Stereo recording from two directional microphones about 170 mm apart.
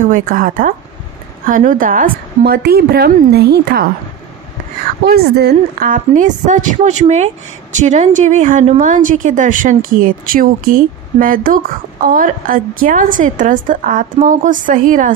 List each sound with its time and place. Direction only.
0.0 s a woman's voice: 50° right (ahead or behind); by 3.8 s 70° right (ahead or behind)
5.0 s a woman's voice: 70° right (ahead or behind)
5.9 s speech: 50° right (ahead or behind)